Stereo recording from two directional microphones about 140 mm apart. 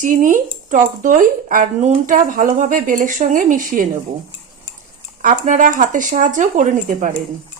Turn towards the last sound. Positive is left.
turn(degrees=-70)  # may be behind; listen again after turning